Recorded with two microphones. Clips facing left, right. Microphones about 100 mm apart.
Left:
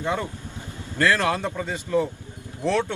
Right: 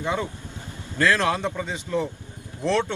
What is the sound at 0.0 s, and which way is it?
Speech, 15° right (ahead or behind).